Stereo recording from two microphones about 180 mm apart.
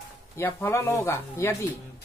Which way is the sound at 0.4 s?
10° left (ahead or behind).